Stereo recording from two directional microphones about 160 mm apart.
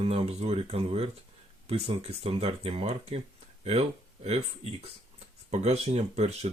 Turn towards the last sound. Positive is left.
turn(degrees=-40)  # may be behind; listen again after turning